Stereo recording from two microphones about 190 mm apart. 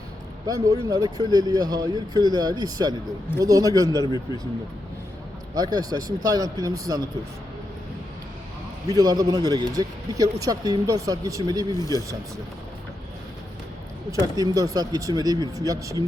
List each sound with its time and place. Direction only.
0.4 s speech: 15° right (ahead or behind)
4.0 s a man's voice: 20° left (ahead or behind)
5.5 s speech: 20° right (ahead or behind)
8.9 s speech: 20° right (ahead or behind)
11.7 s a man's voice: 20° left (ahead or behind)
14.1 s speech: 20° right (ahead or behind)